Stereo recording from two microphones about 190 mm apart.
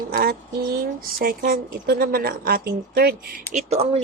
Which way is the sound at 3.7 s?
35° right (ahead or behind).